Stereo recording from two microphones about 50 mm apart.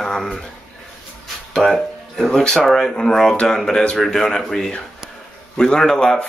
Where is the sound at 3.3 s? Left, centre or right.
Left.